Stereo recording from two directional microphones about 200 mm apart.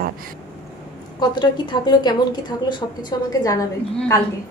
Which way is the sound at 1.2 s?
20° left (ahead or behind).